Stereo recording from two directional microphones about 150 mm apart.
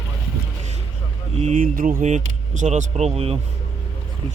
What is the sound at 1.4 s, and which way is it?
Speech, 55° right (ahead or behind).